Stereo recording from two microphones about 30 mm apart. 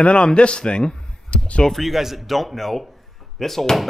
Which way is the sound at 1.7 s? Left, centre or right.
Centre.